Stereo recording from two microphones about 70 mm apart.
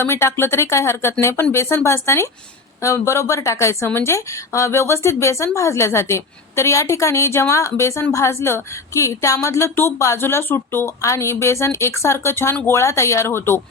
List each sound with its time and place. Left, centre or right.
0.0 s a woman's voice: left
11.0 s a woman's voice: left